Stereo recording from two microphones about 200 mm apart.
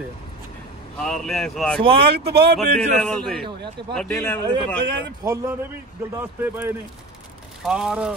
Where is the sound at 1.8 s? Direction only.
25° right (ahead or behind).